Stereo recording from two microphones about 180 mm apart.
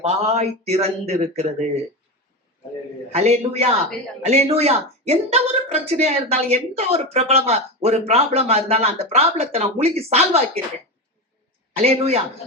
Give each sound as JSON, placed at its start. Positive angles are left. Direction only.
{"t": 0.0, "sound": "speech", "side_deg": -35}
{"t": 3.1, "sound": "speech", "side_deg": -35}
{"t": 11.8, "sound": "speech", "side_deg": -35}